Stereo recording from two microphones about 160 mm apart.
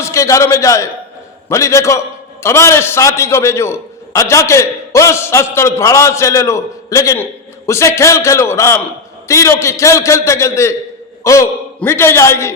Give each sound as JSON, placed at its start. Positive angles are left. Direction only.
{"t": 0.0, "sound": "a man's voice", "side_deg": 20}